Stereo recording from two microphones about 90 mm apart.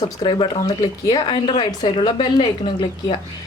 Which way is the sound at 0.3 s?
65° left (ahead or behind).